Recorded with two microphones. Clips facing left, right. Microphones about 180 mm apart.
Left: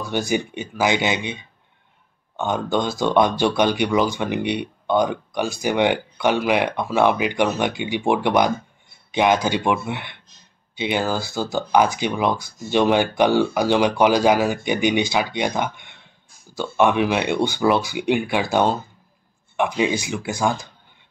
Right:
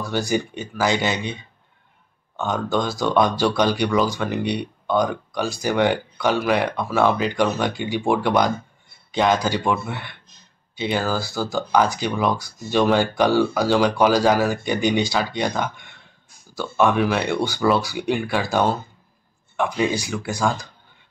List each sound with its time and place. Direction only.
0.1 s speech: 20° left (ahead or behind)